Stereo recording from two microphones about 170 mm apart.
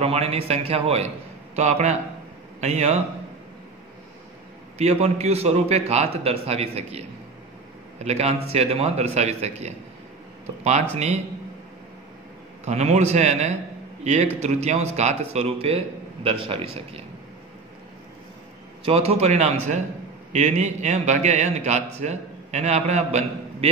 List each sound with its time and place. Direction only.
0.0 s a man's voice: 35° right (ahead or behind)
4.7 s a man's voice: 40° right (ahead or behind)
12.6 s a man's voice: 40° right (ahead or behind)
18.9 s a man's voice: 35° right (ahead or behind)